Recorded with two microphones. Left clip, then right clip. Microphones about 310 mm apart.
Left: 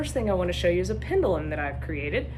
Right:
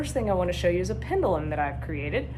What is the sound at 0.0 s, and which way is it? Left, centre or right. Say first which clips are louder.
A woman's voice: even; centre.